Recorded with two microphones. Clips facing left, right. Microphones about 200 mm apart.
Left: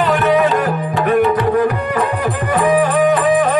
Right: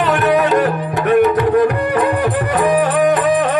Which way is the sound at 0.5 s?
45° right (ahead or behind).